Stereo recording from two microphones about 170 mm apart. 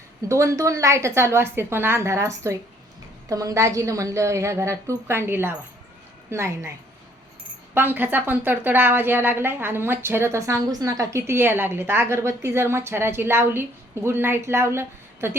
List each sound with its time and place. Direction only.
0.3 s a woman's voice: 20° right (ahead or behind)